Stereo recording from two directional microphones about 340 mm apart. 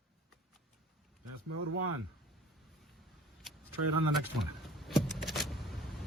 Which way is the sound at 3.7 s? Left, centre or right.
Right.